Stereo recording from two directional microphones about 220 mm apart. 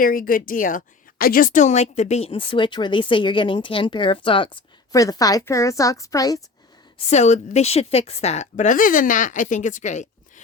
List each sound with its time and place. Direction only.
0.0 s a woman's voice: 40° left (ahead or behind); by 6.4 s 15° left (ahead or behind)
7.1 s a woman's voice: 30° left (ahead or behind)